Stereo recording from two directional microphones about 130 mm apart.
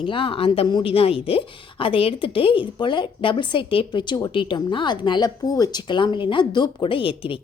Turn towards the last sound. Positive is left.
turn(degrees=40)  # may be behind; listen again after turning